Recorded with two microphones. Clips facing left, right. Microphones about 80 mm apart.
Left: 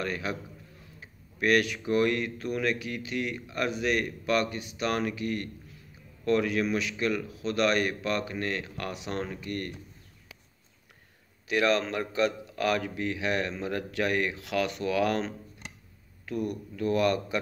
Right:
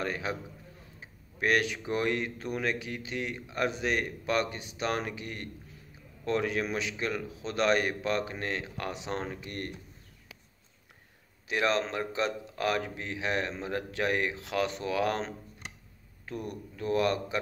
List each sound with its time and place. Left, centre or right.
0.0 s speech: right
1.4 s speech: right
11.4 s speech: right